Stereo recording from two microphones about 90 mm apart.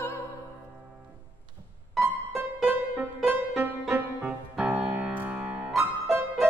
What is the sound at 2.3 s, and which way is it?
Music, 20° right (ahead or behind).